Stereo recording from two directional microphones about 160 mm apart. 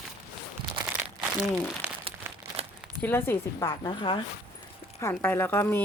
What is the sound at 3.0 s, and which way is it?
A woman's voice, 15° left (ahead or behind).